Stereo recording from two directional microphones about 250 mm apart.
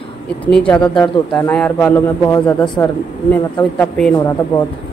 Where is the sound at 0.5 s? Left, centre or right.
Centre.